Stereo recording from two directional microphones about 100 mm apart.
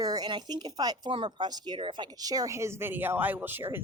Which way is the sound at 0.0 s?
45° right (ahead or behind).